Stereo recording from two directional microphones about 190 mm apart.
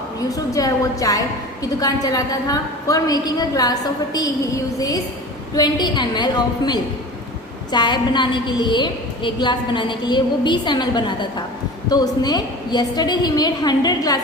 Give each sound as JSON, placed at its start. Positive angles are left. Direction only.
{"t": 0.2, "sound": "a woman's voice", "side_deg": 20}